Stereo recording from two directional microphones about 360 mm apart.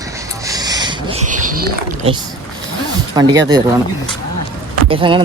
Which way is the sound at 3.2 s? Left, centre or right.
Centre.